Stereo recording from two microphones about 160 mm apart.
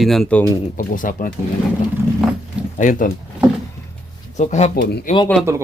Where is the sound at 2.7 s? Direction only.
55° left (ahead or behind).